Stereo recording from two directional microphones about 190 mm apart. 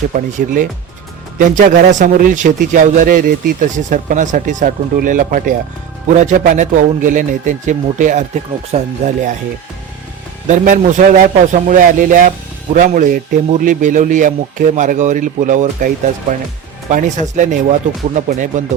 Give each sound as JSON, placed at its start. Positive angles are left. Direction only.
{"t": 0.1, "sound": "a man's voice", "side_deg": -45}
{"t": 10.5, "sound": "a man's voice", "side_deg": -40}
{"t": 16.9, "sound": "speech", "side_deg": -40}